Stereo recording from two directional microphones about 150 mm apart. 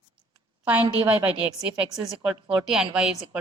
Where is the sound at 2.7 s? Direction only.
5° right (ahead or behind).